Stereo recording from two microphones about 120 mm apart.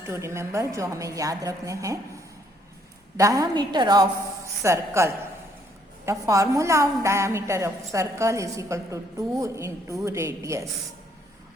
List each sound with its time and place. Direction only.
0.0 s a woman's voice: 20° right (ahead or behind)
3.2 s a woman's voice: 25° right (ahead or behind)
4.6 s a woman's voice: 25° right (ahead or behind)